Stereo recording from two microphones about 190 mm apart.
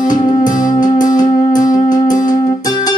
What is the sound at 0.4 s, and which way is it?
Music, 20° left (ahead or behind).